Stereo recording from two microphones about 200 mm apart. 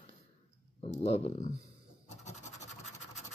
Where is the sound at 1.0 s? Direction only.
30° left (ahead or behind).